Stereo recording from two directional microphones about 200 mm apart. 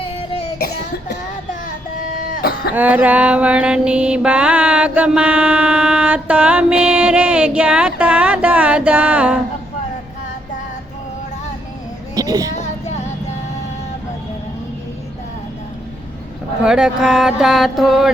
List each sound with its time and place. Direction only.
2.0 s a sound: 45° left (ahead or behind)
2.7 s mantra: 10° right (ahead or behind)
12.1 s child singing: 20° right (ahead or behind)
12.5 s child singing: 35° left (ahead or behind)
16.6 s mantra: 5° right (ahead or behind)